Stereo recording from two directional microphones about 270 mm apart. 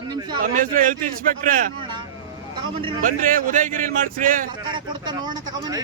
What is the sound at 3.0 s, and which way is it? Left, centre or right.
A man's voice, right.